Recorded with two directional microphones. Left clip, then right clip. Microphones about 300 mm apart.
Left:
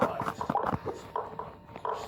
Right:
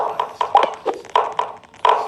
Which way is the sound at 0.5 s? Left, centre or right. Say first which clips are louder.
Right 19 dB; right.